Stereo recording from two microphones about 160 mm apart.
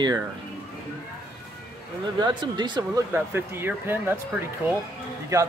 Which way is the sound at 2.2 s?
30° right (ahead or behind).